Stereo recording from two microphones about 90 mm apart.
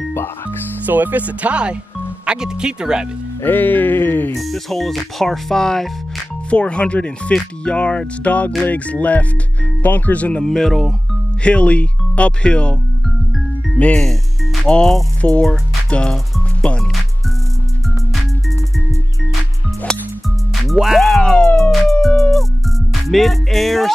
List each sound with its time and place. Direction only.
0.8 s speech: 20° right (ahead or behind)
3.4 s music: 20° left (ahead or behind)
4.4 s speech: centre (ahead or behind)
11.4 s speech: 15° left (ahead or behind)
13.7 s speech: 15° left (ahead or behind)
16.6 s music: 10° left (ahead or behind)
20.6 s music: 5° right (ahead or behind)
23.0 s speech: centre (ahead or behind)